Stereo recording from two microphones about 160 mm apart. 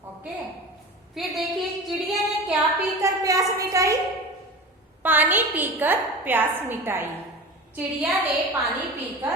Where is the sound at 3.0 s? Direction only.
20° right (ahead or behind).